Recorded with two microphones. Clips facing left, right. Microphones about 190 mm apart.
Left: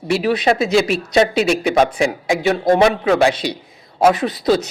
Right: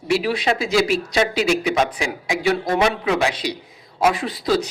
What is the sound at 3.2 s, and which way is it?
Speech, 25° left (ahead or behind).